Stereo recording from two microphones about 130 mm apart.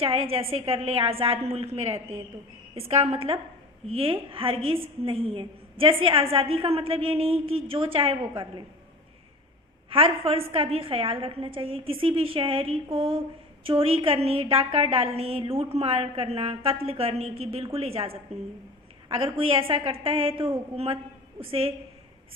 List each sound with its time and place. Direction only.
0.0 s a woman's voice: 50° right (ahead or behind)
9.9 s a woman's voice: 45° right (ahead or behind)